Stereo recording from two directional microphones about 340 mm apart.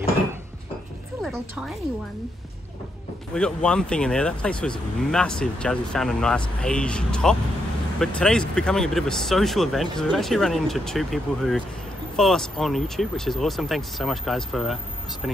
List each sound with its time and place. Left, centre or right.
1.2 s speech: centre
3.3 s speech: centre